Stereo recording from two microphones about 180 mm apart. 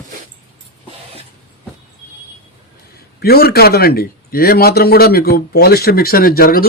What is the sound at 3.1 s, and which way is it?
A man's voice, 60° left (ahead or behind).